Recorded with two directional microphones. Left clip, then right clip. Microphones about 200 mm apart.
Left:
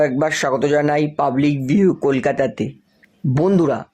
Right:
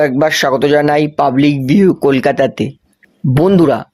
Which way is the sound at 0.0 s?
35° right (ahead or behind).